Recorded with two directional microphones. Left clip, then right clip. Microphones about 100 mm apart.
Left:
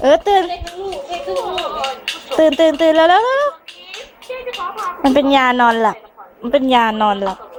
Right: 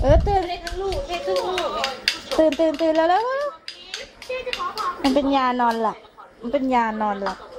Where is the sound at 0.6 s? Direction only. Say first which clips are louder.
Left 1 dB; 50° right (ahead or behind).